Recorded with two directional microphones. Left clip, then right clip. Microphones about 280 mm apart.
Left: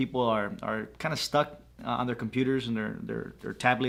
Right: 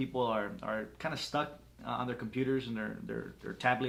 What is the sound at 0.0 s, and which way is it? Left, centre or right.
Speech, left.